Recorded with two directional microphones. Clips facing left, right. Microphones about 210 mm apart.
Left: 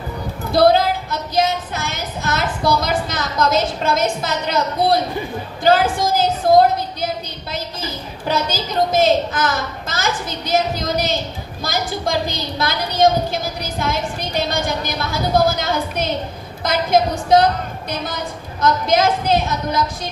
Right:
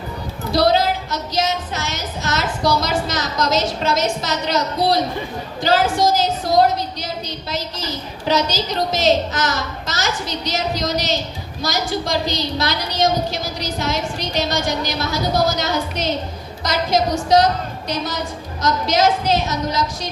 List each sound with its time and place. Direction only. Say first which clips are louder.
0.5 s music: left 3 dB; 55° left (ahead or behind)
2.8 s a woman's voice: even; 55° left (ahead or behind)
8.3 s a woman's voice: right 2 dB; 55° left (ahead or behind)
10.5 s a woman's voice: left 4 dB; 55° left (ahead or behind)